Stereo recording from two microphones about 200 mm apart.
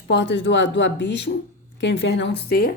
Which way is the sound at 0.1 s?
60° left (ahead or behind).